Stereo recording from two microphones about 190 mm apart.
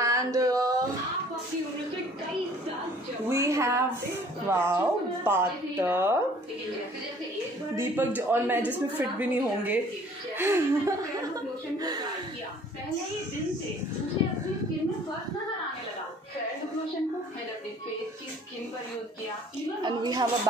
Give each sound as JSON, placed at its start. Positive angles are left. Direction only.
{"t": 0.0, "sound": "a sound", "side_deg": -15}
{"t": 3.3, "sound": "a woman's voice", "side_deg": -15}
{"t": 7.7, "sound": "a woman's voice", "side_deg": -10}
{"t": 19.8, "sound": "a woman's voice", "side_deg": -20}